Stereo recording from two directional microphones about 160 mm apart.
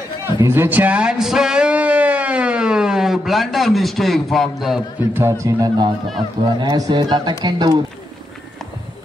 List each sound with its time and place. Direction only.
0.2 s a man's voice: 15° right (ahead or behind)
5.1 s a man's voice: 15° right (ahead or behind)